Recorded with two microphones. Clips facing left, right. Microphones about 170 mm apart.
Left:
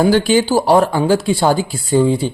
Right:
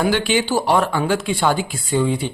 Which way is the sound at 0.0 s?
40° left (ahead or behind).